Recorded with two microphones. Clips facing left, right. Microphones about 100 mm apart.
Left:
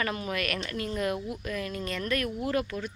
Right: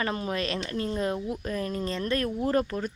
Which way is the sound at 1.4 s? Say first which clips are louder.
Right 3 dB; 35° right (ahead or behind).